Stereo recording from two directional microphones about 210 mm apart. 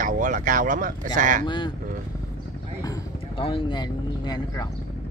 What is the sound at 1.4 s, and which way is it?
Speech, 20° left (ahead or behind).